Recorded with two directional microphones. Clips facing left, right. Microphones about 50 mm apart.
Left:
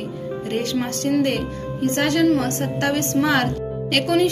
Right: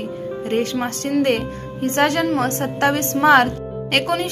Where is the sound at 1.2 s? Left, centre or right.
Right.